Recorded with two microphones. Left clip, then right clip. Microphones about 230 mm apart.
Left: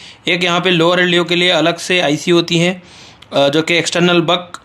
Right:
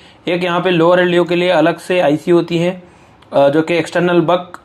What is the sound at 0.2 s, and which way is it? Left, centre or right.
Speech, centre.